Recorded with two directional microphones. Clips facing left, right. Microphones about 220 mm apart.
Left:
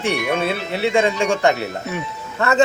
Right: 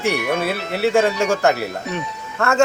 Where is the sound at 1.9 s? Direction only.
5° left (ahead or behind).